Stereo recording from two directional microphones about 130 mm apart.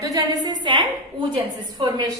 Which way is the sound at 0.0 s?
30° right (ahead or behind).